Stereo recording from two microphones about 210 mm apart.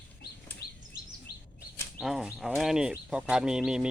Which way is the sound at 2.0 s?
Centre (ahead or behind).